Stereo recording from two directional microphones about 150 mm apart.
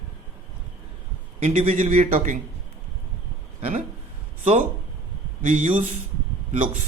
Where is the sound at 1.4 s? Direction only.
45° right (ahead or behind).